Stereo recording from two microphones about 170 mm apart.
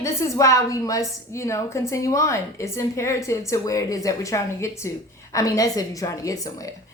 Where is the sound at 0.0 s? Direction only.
15° left (ahead or behind).